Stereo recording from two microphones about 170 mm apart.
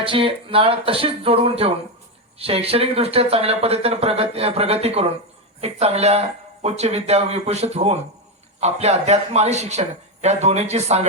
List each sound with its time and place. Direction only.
0.0 s speech: 30° right (ahead or behind)